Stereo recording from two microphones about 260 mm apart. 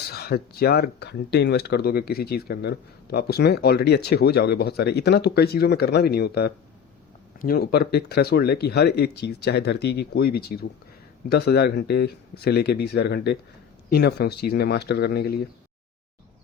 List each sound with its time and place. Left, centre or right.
0.1 s speech: left